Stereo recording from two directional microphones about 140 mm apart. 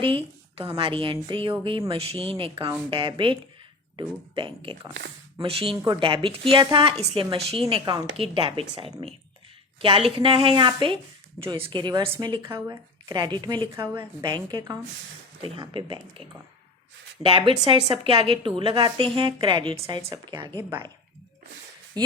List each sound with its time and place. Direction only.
0.0 s a woman's voice: 40° right (ahead or behind)
5.7 s a woman's voice: 25° right (ahead or behind)
6.0 s a woman's voice: 40° right (ahead or behind)
12.5 s speech: 20° right (ahead or behind)
13.1 s a woman's voice: 30° right (ahead or behind)
13.7 s a woman's voice: 20° right (ahead or behind)
14.2 s a woman's voice: 30° right (ahead or behind)
22.0 s a woman's voice: 30° right (ahead or behind)